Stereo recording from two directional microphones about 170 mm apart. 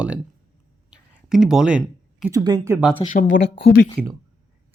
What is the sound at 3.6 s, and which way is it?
Speech, 70° left (ahead or behind).